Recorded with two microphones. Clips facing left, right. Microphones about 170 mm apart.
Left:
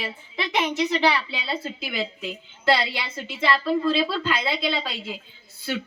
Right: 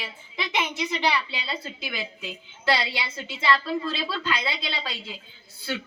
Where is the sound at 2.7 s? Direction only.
50° left (ahead or behind).